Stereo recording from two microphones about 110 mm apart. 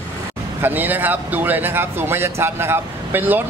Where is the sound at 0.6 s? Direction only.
15° right (ahead or behind).